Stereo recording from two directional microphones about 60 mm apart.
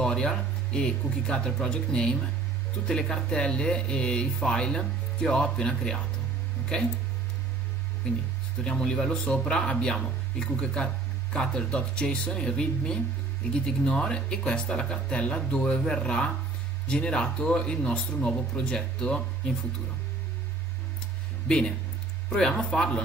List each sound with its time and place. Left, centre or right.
0.0 s speech: centre
8.6 s speech: centre
21.5 s speech: centre
22.8 s speech: centre